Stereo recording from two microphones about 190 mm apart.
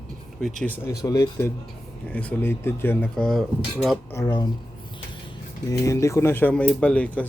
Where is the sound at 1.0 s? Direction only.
20° left (ahead or behind).